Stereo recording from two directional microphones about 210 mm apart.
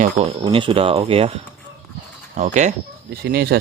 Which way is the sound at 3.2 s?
50° right (ahead or behind).